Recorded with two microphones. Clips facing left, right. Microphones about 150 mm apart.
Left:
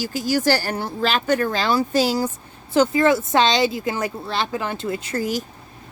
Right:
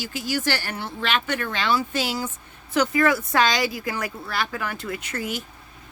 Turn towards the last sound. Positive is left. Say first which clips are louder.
# left 6 dB
turn(degrees=35)  # may be behind; listen again after turning